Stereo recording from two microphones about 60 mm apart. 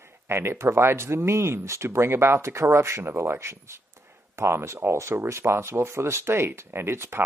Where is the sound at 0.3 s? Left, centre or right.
Right.